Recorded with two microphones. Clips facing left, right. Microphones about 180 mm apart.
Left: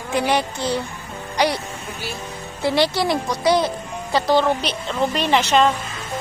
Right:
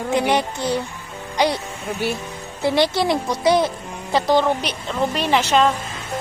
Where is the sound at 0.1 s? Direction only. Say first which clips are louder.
Even; 20° right (ahead or behind).